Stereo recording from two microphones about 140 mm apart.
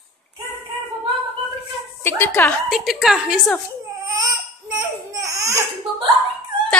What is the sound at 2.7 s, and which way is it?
Speech, centre (ahead or behind).